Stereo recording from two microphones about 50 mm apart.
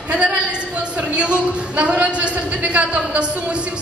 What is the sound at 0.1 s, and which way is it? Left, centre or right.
A woman's voice, right.